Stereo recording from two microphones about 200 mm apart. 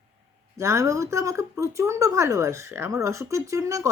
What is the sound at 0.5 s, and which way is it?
Speech, 15° right (ahead or behind).